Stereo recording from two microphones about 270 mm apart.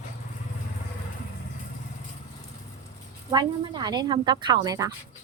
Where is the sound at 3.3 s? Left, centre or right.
Centre.